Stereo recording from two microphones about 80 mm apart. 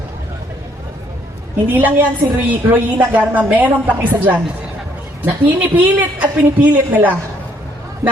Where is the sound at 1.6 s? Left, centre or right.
Right.